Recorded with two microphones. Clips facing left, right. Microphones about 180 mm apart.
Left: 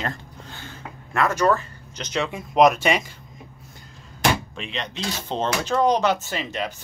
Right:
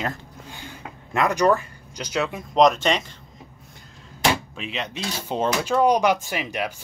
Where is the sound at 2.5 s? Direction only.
10° left (ahead or behind).